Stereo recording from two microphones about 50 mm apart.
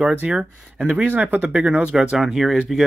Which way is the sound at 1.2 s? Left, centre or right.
Right.